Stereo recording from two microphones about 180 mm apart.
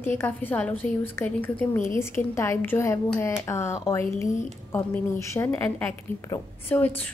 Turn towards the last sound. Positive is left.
turn(degrees=10)  # may be behind; listen again after turning